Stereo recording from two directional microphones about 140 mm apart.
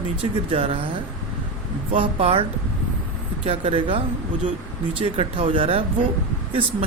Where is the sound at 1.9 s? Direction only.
40° right (ahead or behind).